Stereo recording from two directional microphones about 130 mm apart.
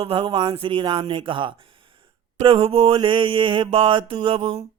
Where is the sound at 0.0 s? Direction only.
45° right (ahead or behind).